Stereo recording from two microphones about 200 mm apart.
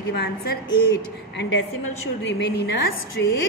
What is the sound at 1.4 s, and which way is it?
A woman's voice, 60° left (ahead or behind).